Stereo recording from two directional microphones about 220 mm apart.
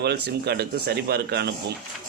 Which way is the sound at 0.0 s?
45° right (ahead or behind).